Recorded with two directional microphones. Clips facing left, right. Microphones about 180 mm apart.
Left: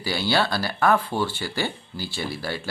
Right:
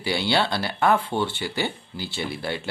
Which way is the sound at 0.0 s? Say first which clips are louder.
Even; 25° right (ahead or behind).